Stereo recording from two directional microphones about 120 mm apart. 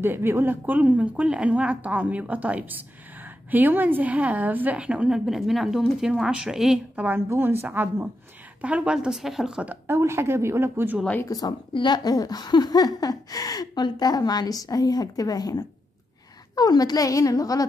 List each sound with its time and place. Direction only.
0.0 s a woman's voice: 20° right (ahead or behind)
7.1 s a woman's voice: 20° right (ahead or behind)
9.9 s a woman's voice: 20° right (ahead or behind)
11.2 s a woman's voice: 30° left (ahead or behind)